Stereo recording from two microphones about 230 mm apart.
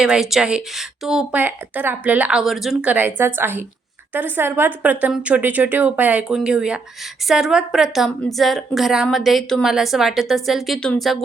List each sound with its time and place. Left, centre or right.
0.0 s a woman's voice: centre